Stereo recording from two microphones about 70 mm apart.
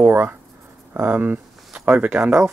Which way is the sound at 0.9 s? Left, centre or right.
Right.